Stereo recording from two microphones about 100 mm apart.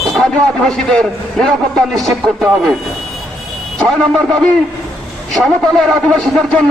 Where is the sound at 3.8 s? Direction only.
10° left (ahead or behind).